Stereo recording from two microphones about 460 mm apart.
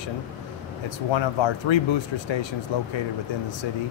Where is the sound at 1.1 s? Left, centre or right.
Left.